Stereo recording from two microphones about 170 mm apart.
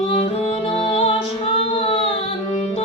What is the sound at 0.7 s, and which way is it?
Music, 35° left (ahead or behind).